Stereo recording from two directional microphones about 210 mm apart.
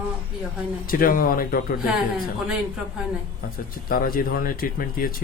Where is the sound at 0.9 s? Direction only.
45° left (ahead or behind).